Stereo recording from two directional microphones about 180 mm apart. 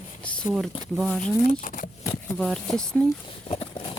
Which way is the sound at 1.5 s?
45° left (ahead or behind).